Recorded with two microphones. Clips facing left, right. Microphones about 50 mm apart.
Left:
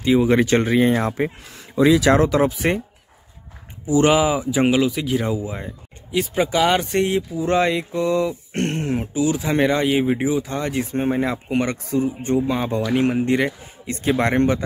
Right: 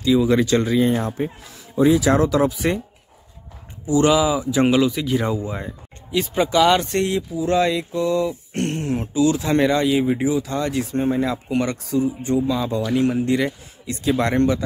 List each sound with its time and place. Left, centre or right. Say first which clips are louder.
0.0 s speech: left 1 dB; left
1.0 s speech: left 3 dB; left
1.8 s speech: left 1 dB; left
2.1 s speech: left 1 dB; left
3.8 s speech: even; left
4.5 s speech: right 1 dB; centre
7.3 s speech: right 1 dB; left
9.2 s speech: right 2 dB; centre; by 14.6 s left